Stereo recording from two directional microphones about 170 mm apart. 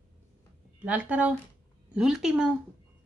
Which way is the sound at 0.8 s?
10° right (ahead or behind).